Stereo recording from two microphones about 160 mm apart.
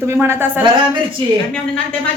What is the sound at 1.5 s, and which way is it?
Speech, 5° left (ahead or behind).